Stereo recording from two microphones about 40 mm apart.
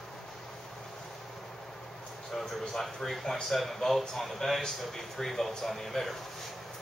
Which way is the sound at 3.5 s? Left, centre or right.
Centre.